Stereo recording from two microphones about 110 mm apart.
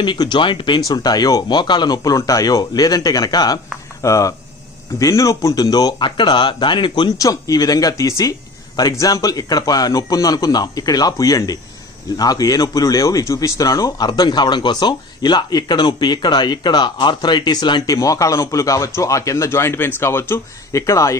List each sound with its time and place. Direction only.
0.0 s speech: 45° left (ahead or behind)
7.2 s speech: 30° left (ahead or behind)